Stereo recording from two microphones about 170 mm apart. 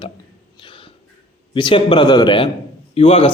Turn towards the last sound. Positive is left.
turn(degrees=35)  # may be behind; listen again after turning